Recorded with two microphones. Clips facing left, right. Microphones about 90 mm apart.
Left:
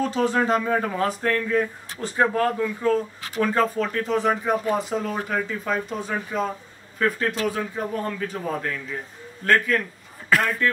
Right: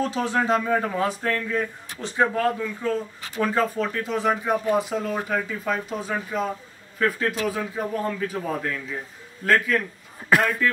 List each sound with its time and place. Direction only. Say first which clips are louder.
0.0 s speech: left 2 dB; centre (ahead or behind)
10.3 s speech: right 1 dB; 20° right (ahead or behind)